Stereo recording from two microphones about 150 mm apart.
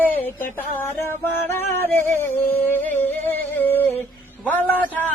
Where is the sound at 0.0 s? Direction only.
10° left (ahead or behind).